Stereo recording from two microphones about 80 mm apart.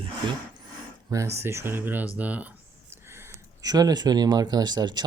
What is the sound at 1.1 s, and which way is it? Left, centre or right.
Speech, right.